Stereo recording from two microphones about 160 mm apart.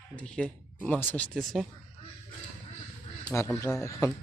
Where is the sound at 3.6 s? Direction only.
15° left (ahead or behind).